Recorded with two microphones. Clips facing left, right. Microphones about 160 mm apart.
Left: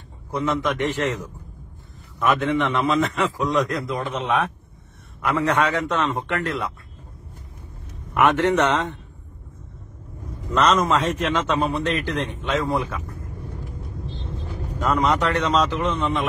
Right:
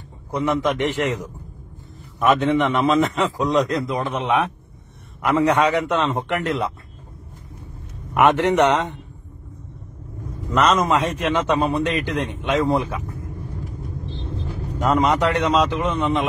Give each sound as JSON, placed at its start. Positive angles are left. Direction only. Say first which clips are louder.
{"t": 0.3, "sound": "a man's voice", "louder": "right 2 dB", "side_deg": -15}
{"t": 8.1, "sound": "a man's voice", "louder": "right 2 dB", "side_deg": -20}
{"t": 10.5, "sound": "a man's voice", "louder": "right 1 dB", "side_deg": -15}
{"t": 14.8, "sound": "a man's voice", "louder": "right 2 dB", "side_deg": -15}